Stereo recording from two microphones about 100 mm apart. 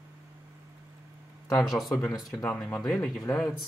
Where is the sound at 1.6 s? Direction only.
Centre (ahead or behind).